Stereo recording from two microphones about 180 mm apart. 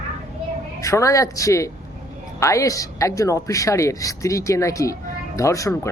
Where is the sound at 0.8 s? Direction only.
15° left (ahead or behind).